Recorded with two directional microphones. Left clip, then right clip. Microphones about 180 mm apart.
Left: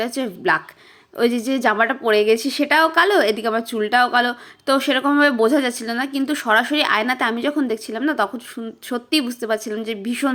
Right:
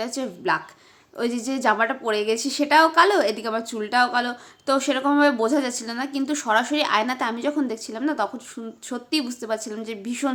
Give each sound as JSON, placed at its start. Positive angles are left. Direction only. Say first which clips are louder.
{"t": 0.0, "sound": "a woman's voice", "louder": "left 5 dB", "side_deg": 20}